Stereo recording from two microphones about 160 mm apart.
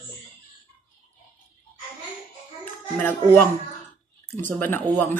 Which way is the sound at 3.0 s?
10° left (ahead or behind).